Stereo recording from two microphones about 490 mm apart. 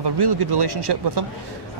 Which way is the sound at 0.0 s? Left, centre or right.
Right.